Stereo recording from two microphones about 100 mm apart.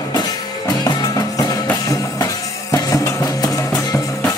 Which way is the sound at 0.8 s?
40° left (ahead or behind).